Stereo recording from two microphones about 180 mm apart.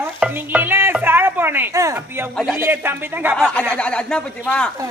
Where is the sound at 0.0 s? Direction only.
10° right (ahead or behind).